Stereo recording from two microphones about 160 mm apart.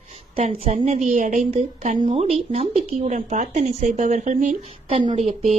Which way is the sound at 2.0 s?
40° right (ahead or behind).